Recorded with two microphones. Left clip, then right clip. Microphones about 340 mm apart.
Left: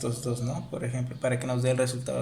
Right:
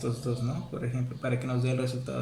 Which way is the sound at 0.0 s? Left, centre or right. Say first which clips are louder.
Left 1 dB; centre.